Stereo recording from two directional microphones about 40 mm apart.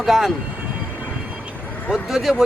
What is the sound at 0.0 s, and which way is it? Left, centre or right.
Speech, centre.